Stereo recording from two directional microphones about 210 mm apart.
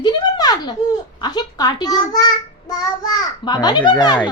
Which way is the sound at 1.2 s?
20° left (ahead or behind).